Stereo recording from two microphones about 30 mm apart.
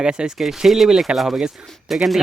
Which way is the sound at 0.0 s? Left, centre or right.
Right.